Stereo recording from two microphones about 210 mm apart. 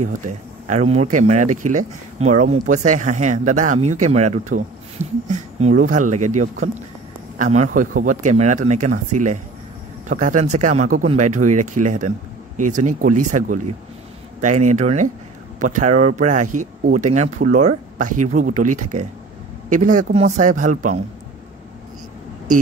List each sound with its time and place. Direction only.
0.0 s speech: 35° right (ahead or behind)